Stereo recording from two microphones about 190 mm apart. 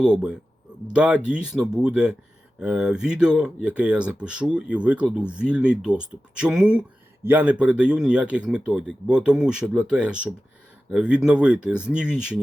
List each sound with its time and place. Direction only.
0.0 s speech: 5° right (ahead or behind)